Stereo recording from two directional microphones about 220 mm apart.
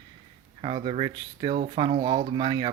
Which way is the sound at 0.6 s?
25° right (ahead or behind).